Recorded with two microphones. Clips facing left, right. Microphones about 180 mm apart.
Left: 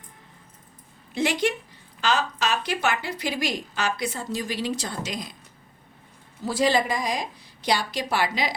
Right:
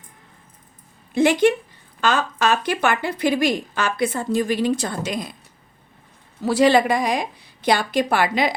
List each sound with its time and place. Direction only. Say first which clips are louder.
1.1 s speech: right 8 dB; 55° right (ahead or behind)
6.4 s a woman's voice: right 7 dB; 70° right (ahead or behind)